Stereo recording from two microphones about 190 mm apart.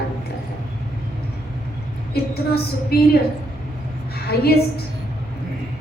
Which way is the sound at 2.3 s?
55° left (ahead or behind).